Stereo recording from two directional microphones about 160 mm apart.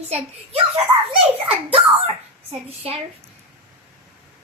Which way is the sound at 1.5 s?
35° right (ahead or behind).